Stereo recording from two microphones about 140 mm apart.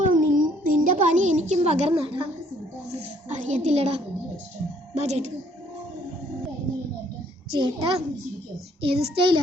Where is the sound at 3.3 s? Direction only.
55° right (ahead or behind).